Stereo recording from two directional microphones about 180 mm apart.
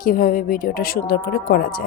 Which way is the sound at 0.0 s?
50° left (ahead or behind).